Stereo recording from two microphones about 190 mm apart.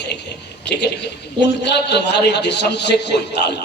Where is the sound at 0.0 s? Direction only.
65° left (ahead or behind).